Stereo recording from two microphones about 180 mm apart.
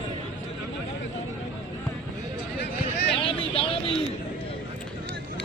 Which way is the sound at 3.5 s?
30° left (ahead or behind).